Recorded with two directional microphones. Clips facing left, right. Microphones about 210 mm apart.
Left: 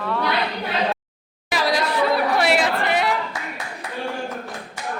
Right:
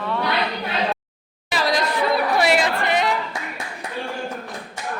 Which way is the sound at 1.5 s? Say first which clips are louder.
Even; 10° left (ahead or behind).